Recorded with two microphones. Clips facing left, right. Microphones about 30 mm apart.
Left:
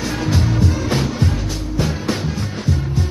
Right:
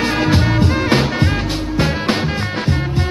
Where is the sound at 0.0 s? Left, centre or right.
Right.